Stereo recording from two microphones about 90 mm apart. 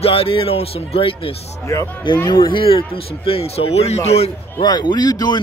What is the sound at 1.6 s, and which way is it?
Speech, 35° left (ahead or behind).